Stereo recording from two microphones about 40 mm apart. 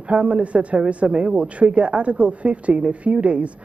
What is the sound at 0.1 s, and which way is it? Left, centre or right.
A man's voice, right.